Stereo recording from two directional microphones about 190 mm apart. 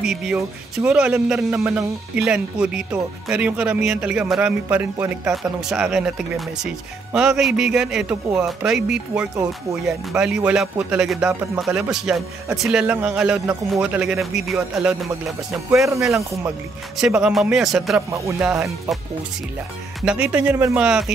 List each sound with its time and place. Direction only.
0.0 s speech: 5° right (ahead or behind)
15.9 s speech: 15° right (ahead or behind)
17.0 s speech: 5° right (ahead or behind)
20.0 s speech: 5° right (ahead or behind)